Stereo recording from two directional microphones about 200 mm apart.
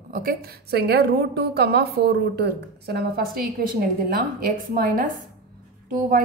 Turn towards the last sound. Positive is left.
turn(degrees=-45)  # may be behind; listen again after turning